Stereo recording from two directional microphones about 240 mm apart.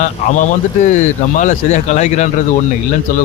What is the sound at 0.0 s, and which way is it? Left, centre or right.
Speech, left.